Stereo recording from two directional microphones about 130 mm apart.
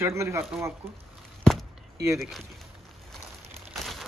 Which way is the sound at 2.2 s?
Centre (ahead or behind).